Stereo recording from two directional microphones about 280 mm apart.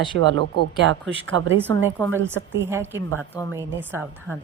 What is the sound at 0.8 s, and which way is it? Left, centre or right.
Speech, right.